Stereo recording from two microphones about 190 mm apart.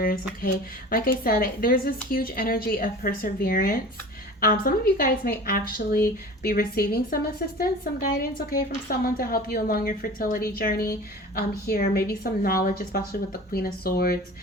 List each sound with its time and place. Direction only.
0.0 s a woman's voice: 50° left (ahead or behind)